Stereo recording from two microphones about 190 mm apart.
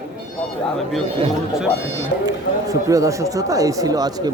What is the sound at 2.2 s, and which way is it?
Speech, 20° right (ahead or behind).